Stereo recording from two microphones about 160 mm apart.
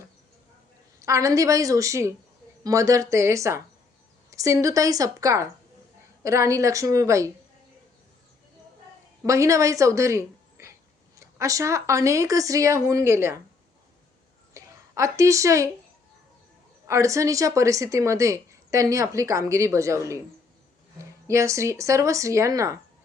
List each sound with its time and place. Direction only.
1.0 s a woman's voice: 20° right (ahead or behind)
9.2 s a woman's voice: 20° right (ahead or behind)
14.5 s speech: 20° right (ahead or behind)
16.8 s a woman's voice: 20° right (ahead or behind)
21.2 s a woman's voice: 20° right (ahead or behind)